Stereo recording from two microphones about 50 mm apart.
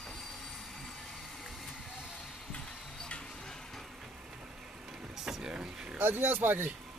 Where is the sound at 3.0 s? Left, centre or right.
Centre.